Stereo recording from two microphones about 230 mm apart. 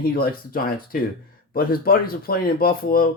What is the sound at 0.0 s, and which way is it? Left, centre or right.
Speech, left.